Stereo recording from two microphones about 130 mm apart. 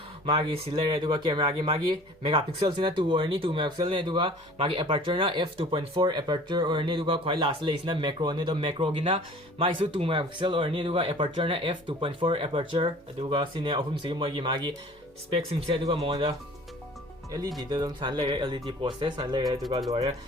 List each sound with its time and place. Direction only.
0.3 s speech: 45° right (ahead or behind)
15.3 s speech: 45° right (ahead or behind)
17.6 s speech: 30° right (ahead or behind)